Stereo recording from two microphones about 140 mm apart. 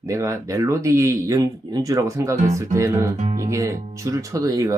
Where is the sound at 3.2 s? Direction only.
55° right (ahead or behind).